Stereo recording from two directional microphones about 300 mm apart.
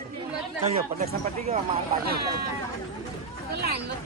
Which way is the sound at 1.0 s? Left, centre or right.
Right.